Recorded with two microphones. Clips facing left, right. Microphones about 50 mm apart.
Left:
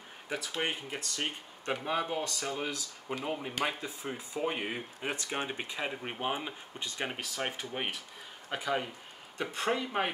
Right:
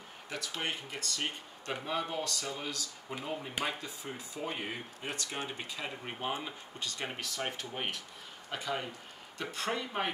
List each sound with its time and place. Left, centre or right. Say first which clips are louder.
0.3 s speech: left 3 dB; centre